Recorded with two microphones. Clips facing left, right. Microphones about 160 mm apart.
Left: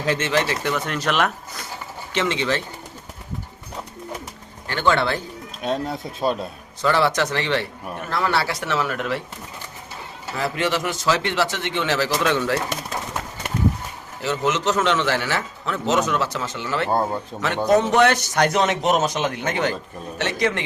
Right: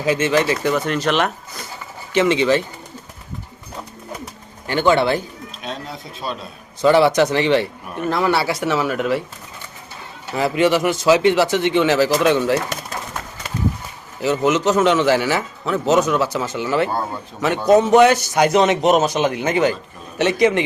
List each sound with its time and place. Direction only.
0.0 s speech: 5° right (ahead or behind)
2.1 s a man's voice: 10° right (ahead or behind)
4.7 s a man's voice: 15° right (ahead or behind)
5.6 s speech: 50° left (ahead or behind)
6.8 s a man's voice: 15° right (ahead or behind)
10.3 s a man's voice: 15° right (ahead or behind)
14.2 s a man's voice: 10° right (ahead or behind)